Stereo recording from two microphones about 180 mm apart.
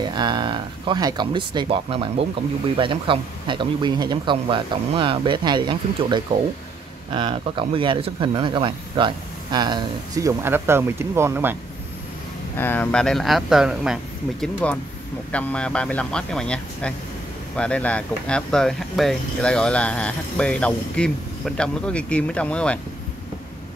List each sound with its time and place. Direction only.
0.0 s speech: 25° right (ahead or behind)
12.5 s speech: 10° left (ahead or behind)